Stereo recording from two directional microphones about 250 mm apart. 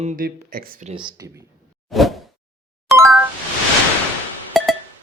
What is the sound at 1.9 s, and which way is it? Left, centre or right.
Whoosh, centre.